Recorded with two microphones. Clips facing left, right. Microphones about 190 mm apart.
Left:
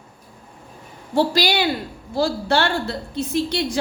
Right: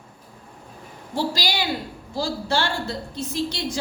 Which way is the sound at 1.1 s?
60° left (ahead or behind).